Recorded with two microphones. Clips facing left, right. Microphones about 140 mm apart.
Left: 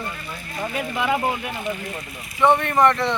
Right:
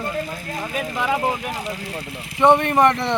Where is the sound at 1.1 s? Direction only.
10° right (ahead or behind).